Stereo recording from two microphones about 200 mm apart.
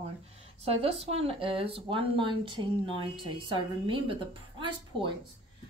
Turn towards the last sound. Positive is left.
turn(degrees=-25)  # may be behind; listen again after turning